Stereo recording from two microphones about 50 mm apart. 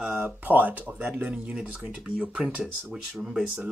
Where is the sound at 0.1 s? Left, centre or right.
Right.